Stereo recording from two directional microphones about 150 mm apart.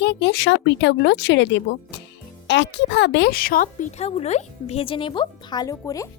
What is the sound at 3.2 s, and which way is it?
Speech, 80° left.